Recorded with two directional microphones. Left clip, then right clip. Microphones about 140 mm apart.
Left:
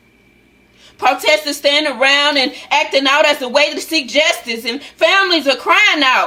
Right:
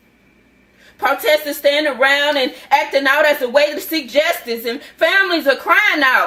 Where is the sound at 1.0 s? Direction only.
20° left (ahead or behind).